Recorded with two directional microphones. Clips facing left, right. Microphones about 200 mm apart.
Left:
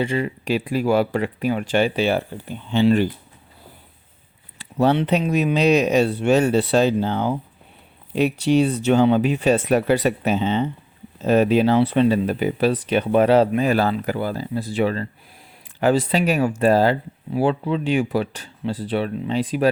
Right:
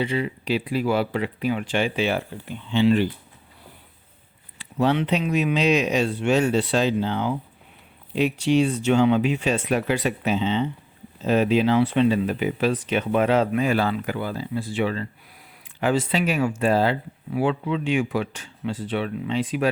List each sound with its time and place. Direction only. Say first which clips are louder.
0.0 s speech: left 2 dB; 45° left (ahead or behind)
4.5 s speech: left 3 dB; 40° left (ahead or behind)